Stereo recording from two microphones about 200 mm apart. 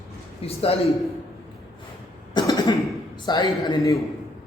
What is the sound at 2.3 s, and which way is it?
Cough, 20° left (ahead or behind).